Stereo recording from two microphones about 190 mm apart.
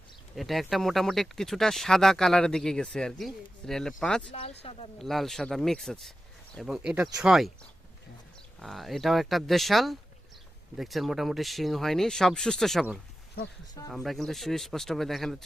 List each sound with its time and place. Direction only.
0.3 s speech: centre (ahead or behind)
4.3 s speech: 30° left (ahead or behind)
4.9 s speech: centre (ahead or behind)
8.5 s speech: centre (ahead or behind)